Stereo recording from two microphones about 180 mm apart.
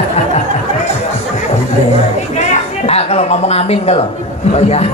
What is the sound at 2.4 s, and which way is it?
Speech, 35° left (ahead or behind).